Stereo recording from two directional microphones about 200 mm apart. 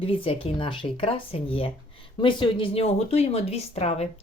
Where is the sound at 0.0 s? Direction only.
25° left (ahead or behind).